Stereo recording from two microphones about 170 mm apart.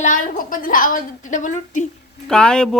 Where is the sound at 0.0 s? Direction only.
50° left (ahead or behind).